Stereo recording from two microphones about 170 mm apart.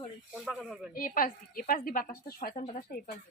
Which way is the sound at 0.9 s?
55° left (ahead or behind).